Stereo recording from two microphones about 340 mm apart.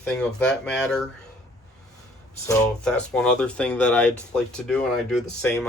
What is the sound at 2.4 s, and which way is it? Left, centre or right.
Speech, centre.